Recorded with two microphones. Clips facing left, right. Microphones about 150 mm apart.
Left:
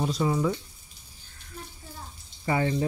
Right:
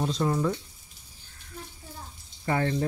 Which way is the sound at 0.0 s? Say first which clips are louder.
Left 1 dB; 5° left (ahead or behind).